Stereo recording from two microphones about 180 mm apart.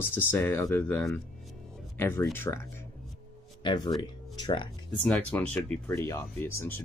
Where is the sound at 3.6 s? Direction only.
25° left (ahead or behind).